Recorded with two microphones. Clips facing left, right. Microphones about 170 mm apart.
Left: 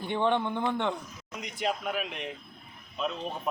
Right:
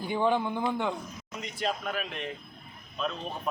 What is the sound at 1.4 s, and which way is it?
Speech, 15° left (ahead or behind).